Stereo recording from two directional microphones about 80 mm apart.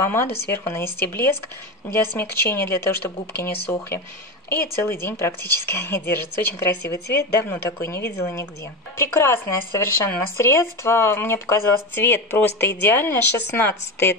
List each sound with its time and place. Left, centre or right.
0.0 s speech: left